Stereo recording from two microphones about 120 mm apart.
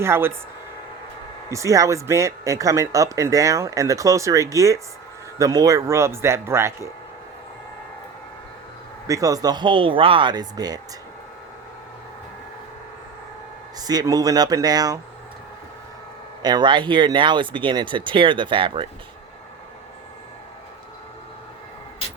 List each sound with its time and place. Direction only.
0.0 s speech: 20° right (ahead or behind)
1.5 s speech: 25° right (ahead or behind)
9.0 s speech: 30° right (ahead or behind)
13.7 s speech: 30° right (ahead or behind)
16.4 s speech: 35° right (ahead or behind)